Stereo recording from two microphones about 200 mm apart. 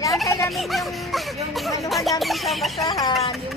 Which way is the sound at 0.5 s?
Centre (ahead or behind).